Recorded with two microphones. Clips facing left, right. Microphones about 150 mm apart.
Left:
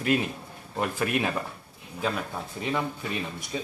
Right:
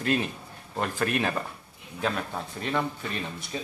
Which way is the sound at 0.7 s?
10° left (ahead or behind).